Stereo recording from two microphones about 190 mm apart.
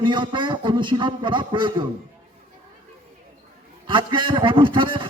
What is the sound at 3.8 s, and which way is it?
A man's voice, 25° right (ahead or behind).